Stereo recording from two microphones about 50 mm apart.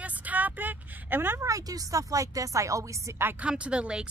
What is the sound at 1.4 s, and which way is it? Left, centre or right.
A woman's voice, right.